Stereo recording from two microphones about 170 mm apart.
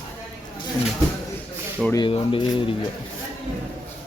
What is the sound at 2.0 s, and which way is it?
Speech, 30° left (ahead or behind).